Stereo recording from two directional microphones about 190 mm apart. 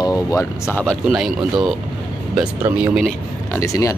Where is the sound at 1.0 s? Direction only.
Centre (ahead or behind).